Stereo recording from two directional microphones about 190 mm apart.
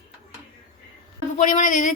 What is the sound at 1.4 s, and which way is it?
Speech, 40° left (ahead or behind).